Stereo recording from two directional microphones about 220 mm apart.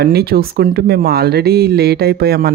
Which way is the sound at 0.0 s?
45° right (ahead or behind).